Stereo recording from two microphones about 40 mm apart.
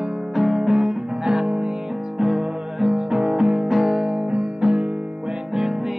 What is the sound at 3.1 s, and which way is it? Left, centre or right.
Music, right.